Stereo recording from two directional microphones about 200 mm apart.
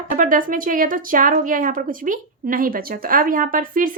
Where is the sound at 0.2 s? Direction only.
40° right (ahead or behind).